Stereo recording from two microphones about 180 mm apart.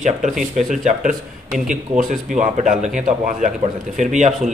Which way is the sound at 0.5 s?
45° right (ahead or behind).